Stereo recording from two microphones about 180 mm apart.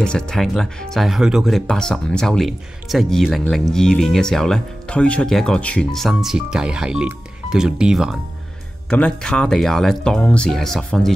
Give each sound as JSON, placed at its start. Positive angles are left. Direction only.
{"t": 0.0, "sound": "speech", "side_deg": 5}